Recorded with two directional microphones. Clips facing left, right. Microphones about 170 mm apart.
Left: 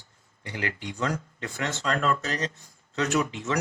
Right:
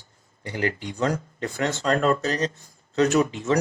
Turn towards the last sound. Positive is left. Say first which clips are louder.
# right 6 dB
turn(degrees=-35)  # may be behind; listen again after turning